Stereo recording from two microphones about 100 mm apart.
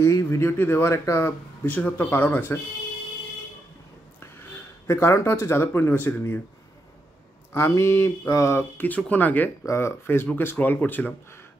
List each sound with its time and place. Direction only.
0.0 s speech: 30° left (ahead or behind)
4.8 s speech: 25° left (ahead or behind)
7.5 s speech: 30° left (ahead or behind)